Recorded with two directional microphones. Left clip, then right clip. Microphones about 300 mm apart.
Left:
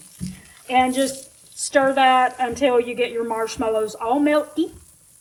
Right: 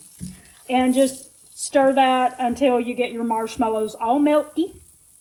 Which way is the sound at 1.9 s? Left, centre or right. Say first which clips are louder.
Left 1 dB; centre.